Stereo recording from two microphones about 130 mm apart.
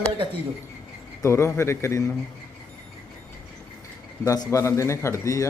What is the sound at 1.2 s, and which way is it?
Speech, 20° left (ahead or behind).